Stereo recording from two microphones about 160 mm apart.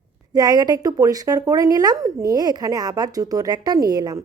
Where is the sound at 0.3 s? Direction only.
25° right (ahead or behind).